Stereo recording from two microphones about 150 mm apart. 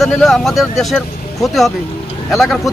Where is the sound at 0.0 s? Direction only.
Centre (ahead or behind).